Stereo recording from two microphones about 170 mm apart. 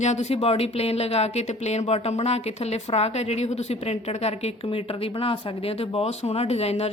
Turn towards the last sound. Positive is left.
turn(degrees=40)  # may be behind; listen again after turning